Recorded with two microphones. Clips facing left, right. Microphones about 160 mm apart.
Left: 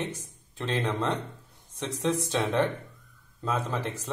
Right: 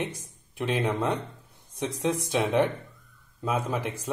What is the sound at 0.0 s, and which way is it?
Speech, 10° right (ahead or behind).